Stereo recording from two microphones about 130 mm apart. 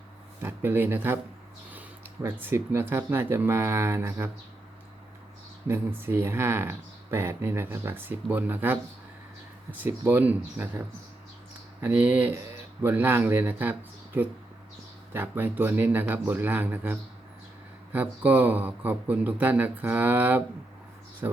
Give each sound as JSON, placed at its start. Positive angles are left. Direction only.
{"t": 0.4, "sound": "speech", "side_deg": -15}
{"t": 6.0, "sound": "speech", "side_deg": -15}
{"t": 9.8, "sound": "speech", "side_deg": -15}